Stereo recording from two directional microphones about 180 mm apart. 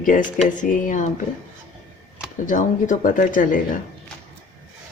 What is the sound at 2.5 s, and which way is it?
Speech, 45° left (ahead or behind).